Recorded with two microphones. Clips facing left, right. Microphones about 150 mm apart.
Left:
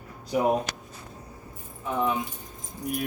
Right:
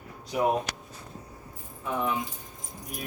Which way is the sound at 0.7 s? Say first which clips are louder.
Left 1 dB; 25° left (ahead or behind).